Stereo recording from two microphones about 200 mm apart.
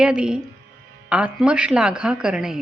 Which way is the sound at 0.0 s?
5° right (ahead or behind).